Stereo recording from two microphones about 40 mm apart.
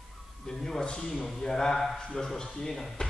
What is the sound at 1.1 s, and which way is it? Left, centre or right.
Speech, centre.